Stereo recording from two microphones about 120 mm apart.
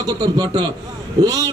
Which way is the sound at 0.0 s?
35° right (ahead or behind).